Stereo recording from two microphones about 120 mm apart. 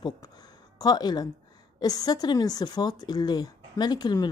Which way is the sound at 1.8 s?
35° left (ahead or behind).